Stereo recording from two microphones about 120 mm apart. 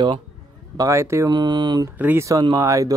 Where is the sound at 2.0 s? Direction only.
20° right (ahead or behind).